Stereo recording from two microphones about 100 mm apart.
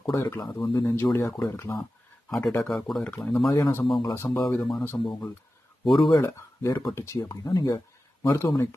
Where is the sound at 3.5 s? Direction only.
35° left (ahead or behind).